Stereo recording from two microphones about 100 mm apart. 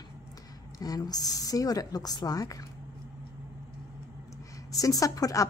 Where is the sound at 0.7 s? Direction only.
40° left (ahead or behind).